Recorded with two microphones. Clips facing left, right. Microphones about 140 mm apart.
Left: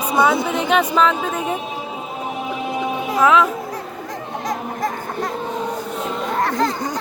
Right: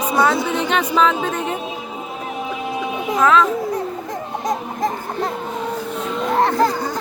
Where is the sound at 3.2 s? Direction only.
15° left (ahead or behind).